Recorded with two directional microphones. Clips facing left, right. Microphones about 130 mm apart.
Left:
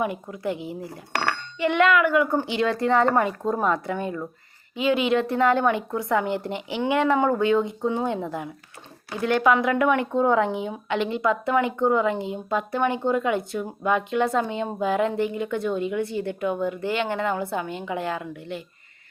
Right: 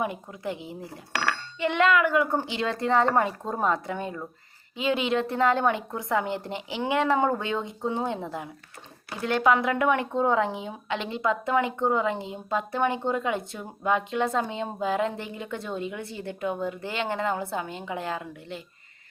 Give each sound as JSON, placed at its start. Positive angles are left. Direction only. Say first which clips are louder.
{"t": 0.0, "sound": "a woman's voice", "louder": "left 4 dB", "side_deg": -30}
{"t": 9.2, "sound": "a woman's voice", "louder": "left 3 dB", "side_deg": -30}